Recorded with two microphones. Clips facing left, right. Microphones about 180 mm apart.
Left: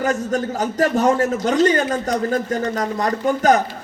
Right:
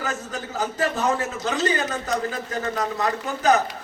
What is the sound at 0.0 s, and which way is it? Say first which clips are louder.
Speech: left 10 dB; 45° left (ahead or behind).